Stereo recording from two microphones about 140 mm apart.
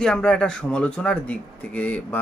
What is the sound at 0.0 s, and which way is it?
Speech, 5° left (ahead or behind).